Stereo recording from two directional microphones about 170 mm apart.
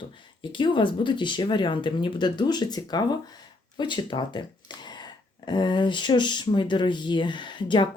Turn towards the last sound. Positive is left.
turn(degrees=30)  # may be behind; listen again after turning